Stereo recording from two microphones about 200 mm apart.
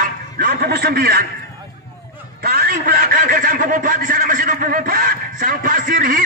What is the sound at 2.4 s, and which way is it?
A man's voice, 50° right (ahead or behind).